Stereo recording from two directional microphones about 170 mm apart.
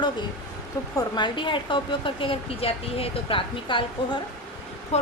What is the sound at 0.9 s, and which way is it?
A woman's voice, 25° left (ahead or behind).